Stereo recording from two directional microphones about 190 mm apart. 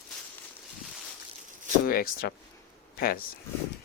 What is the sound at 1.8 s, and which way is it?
Speech, 50° left (ahead or behind).